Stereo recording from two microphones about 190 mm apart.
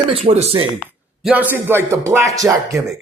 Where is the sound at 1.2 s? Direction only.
5° right (ahead or behind).